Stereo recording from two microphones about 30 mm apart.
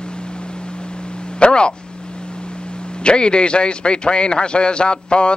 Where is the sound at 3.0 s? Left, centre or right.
Left.